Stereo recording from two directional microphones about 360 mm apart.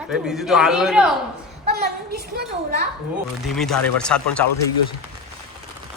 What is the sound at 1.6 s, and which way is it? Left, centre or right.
A woman's voice, right.